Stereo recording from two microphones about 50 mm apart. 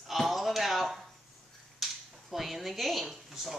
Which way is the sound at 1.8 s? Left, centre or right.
Centre.